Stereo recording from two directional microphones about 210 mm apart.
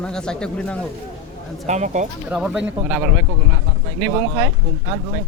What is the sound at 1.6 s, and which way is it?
Speech, 35° right (ahead or behind).